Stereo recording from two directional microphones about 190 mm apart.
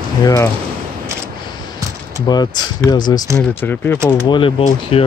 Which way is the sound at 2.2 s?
20° left (ahead or behind).